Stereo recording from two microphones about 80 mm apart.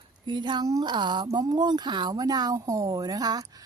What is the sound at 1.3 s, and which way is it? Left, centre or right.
Speech, right.